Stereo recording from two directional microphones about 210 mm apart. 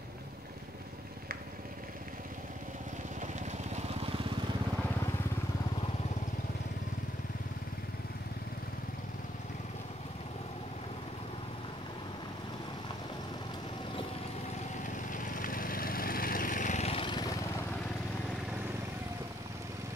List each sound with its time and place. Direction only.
3.2 s vehicle: 35° right (ahead or behind)
14.8 s lawn mower: 40° left (ahead or behind); by 17.6 s 15° left (ahead or behind)